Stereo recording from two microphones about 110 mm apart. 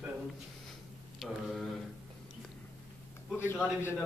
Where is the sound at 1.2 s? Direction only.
Centre (ahead or behind).